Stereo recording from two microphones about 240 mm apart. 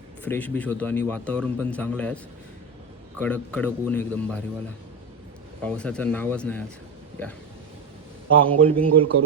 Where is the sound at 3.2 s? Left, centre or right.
Centre.